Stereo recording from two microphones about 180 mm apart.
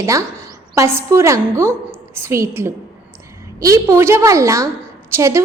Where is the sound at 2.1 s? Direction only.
15° right (ahead or behind).